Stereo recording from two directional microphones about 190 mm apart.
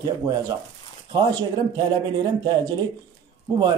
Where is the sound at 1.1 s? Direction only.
20° right (ahead or behind).